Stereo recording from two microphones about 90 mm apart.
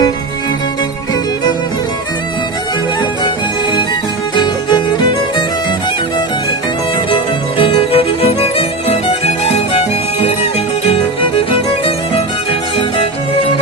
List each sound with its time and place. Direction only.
3.2 s music: 55° left (ahead or behind)
7.6 s music: 85° left
10.8 s music: 90° left